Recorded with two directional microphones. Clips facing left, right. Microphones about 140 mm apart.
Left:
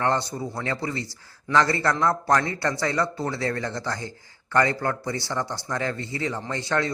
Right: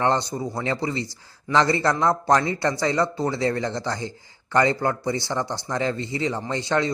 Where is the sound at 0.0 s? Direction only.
20° right (ahead or behind).